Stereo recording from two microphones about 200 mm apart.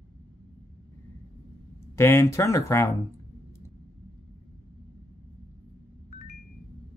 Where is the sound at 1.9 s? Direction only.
15° left (ahead or behind).